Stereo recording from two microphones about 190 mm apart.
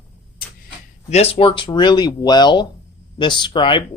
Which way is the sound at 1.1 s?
30° left (ahead or behind).